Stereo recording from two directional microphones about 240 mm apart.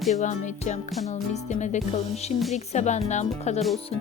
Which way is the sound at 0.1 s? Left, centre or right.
Left.